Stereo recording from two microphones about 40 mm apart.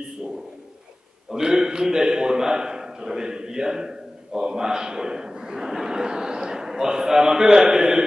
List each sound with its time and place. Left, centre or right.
1.3 s a man's voice: centre